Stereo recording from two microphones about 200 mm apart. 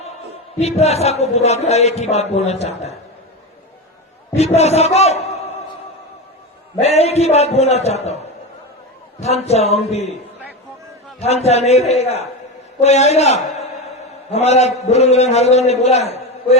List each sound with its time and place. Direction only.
0.6 s a man's voice: 30° left (ahead or behind)
4.4 s a man's voice: 30° left (ahead or behind)
6.7 s a man's voice: 30° left (ahead or behind)
9.2 s a man's voice: 35° left (ahead or behind)
11.2 s a man's voice: 30° left (ahead or behind)